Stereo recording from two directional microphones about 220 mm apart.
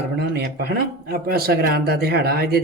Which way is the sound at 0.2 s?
45° right (ahead or behind).